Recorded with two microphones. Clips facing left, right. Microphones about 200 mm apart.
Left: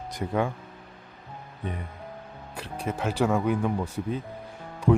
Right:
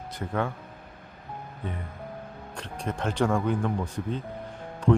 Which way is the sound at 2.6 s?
5° left (ahead or behind).